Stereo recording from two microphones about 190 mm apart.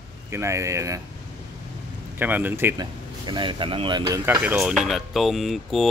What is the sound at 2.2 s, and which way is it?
Speech, 10° right (ahead or behind).